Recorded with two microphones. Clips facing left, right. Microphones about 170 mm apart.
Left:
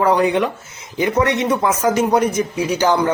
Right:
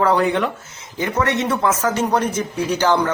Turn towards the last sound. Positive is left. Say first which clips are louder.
# left 1 dB
turn(degrees=10)  # may be behind; listen again after turning